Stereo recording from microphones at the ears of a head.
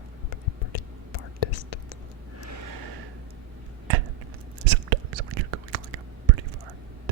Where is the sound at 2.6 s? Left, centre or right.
Right.